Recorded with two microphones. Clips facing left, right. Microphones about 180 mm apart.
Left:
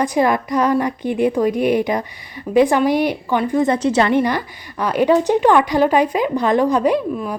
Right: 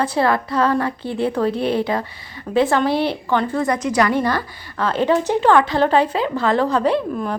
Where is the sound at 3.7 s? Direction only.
30° left (ahead or behind).